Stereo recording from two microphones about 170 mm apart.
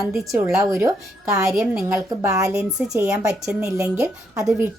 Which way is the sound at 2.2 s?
20° right (ahead or behind).